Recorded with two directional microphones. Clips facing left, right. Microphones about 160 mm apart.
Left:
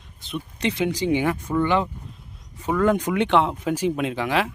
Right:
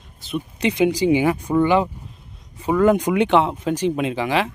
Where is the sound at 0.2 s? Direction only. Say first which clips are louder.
Right 4 dB; 5° right (ahead or behind).